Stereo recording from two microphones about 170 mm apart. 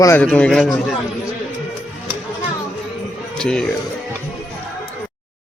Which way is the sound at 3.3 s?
5° left (ahead or behind).